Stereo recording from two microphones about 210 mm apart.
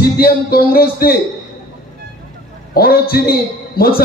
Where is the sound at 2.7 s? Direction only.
45° left (ahead or behind).